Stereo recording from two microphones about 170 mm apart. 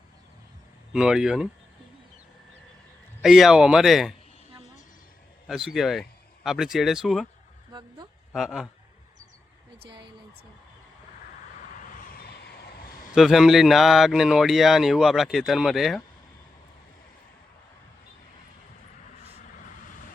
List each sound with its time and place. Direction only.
0.9 s speech: 5° right (ahead or behind)
3.2 s speech: centre (ahead or behind)
5.5 s speech: centre (ahead or behind)
7.7 s speech: 25° right (ahead or behind)
8.3 s speech: centre (ahead or behind)
13.1 s speech: centre (ahead or behind)